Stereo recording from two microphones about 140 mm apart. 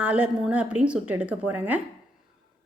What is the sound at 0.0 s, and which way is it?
A woman's voice, 10° right (ahead or behind).